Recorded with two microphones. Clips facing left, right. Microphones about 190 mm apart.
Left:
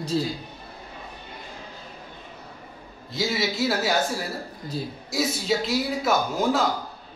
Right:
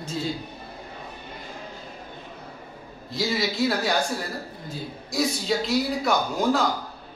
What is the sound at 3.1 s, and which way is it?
Speech, centre (ahead or behind).